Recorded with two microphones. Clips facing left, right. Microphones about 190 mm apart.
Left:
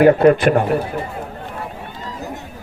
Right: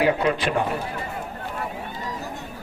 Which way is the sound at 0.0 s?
50° left (ahead or behind).